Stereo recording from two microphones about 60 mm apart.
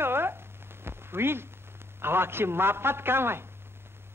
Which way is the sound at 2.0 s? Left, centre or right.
Right.